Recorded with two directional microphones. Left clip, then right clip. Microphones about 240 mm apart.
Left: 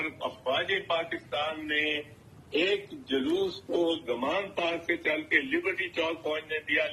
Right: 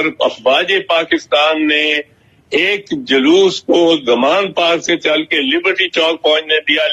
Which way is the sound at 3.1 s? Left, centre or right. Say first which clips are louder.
Right 19 dB; right.